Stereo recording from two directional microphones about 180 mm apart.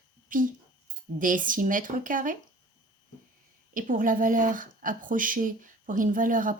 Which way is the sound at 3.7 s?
50° right (ahead or behind).